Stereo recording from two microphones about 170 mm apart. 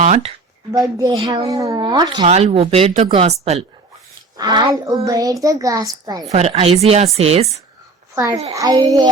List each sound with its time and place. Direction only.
0.0 s speech: 40° right (ahead or behind)
0.7 s a child's voice: 20° right (ahead or behind)
2.2 s speech: 40° right (ahead or behind)
4.4 s a child's voice: 25° right (ahead or behind)
6.3 s speech: 40° right (ahead or behind)
8.1 s a child's voice: 15° right (ahead or behind)